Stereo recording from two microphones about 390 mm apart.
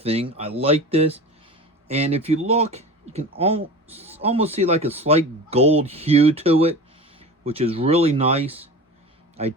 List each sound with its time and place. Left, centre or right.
0.0 s speech: centre